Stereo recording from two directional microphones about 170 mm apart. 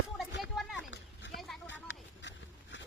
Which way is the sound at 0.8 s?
90° left.